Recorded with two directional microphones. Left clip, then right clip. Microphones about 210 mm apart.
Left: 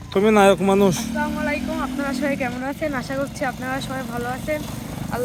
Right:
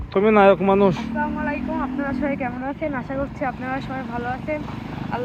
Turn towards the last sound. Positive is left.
turn(degrees=15)  # may be behind; listen again after turning